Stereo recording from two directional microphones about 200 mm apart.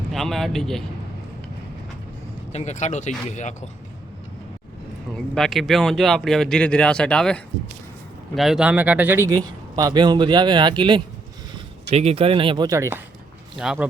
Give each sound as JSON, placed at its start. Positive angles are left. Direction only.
{"t": 0.1, "sound": "speech", "side_deg": 0}
{"t": 2.5, "sound": "speech", "side_deg": 35}
{"t": 5.1, "sound": "a man's voice", "side_deg": 0}
{"t": 13.6, "sound": "speech", "side_deg": 0}